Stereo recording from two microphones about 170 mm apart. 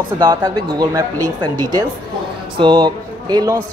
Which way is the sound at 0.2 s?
20° right (ahead or behind).